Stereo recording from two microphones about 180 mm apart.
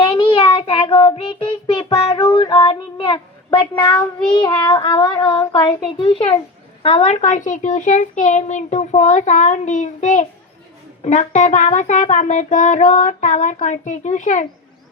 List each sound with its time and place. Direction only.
0.1 s child singing: 30° left (ahead or behind)
6.8 s a child's voice: 35° left (ahead or behind)